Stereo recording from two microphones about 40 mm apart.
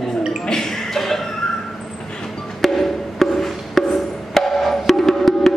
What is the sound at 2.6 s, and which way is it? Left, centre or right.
Music, centre.